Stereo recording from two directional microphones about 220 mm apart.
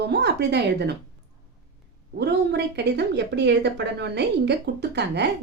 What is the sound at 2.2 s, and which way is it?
Speech, 50° right (ahead or behind).